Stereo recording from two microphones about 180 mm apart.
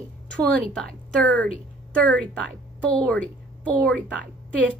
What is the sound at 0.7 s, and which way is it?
A woman's voice, 10° left (ahead or behind).